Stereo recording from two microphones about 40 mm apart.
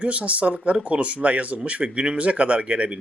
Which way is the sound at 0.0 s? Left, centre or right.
Right.